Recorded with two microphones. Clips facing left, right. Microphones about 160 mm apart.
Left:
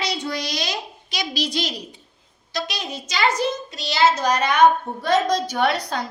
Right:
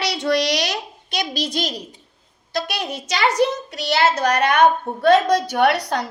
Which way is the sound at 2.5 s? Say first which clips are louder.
Right 4 dB; 60° right (ahead or behind).